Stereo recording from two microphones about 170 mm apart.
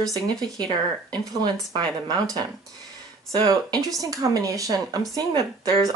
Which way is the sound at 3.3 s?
25° right (ahead or behind).